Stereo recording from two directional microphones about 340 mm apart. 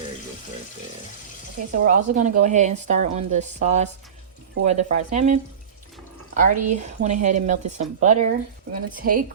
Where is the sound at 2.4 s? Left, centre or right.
Right.